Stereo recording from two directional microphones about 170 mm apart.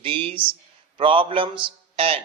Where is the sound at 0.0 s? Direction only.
30° right (ahead or behind).